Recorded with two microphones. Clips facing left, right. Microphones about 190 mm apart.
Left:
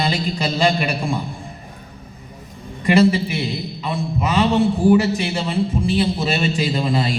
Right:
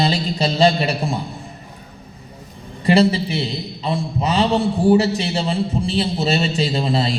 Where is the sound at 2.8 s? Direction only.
30° right (ahead or behind).